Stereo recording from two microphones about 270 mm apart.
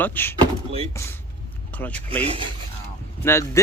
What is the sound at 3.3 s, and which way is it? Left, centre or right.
Speech, centre.